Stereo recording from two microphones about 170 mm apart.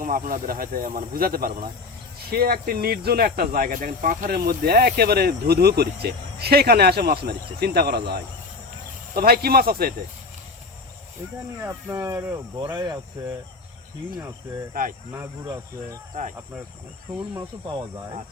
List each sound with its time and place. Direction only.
0.0 s speech: 55° right (ahead or behind)
11.6 s speech: 15° right (ahead or behind)
14.7 s speech: 50° right (ahead or behind)
15.1 s speech: 15° right (ahead or behind)